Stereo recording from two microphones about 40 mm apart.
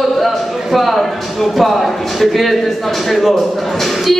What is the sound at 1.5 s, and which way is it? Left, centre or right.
Speech, centre.